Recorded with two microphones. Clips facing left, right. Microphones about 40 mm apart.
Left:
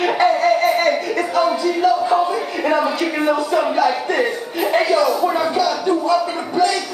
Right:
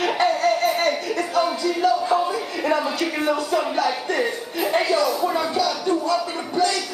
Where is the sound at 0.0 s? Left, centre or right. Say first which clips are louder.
Left 4 dB; centre.